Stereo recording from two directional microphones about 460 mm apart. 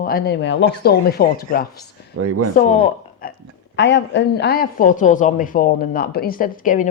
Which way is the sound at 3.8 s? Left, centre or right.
Left.